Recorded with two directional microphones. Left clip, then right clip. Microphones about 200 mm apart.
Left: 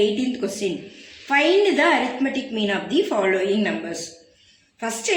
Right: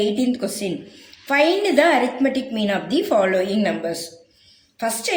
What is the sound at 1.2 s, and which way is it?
A woman's voice, 55° right (ahead or behind).